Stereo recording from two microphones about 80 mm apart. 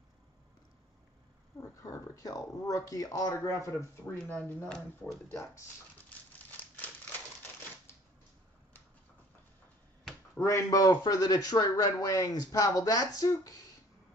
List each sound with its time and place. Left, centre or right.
1.6 s speech: left
3.3 s speech: left
4.3 s speech: left
4.7 s speech: centre
5.3 s speech: left
10.4 s speech: left
10.9 s speech: left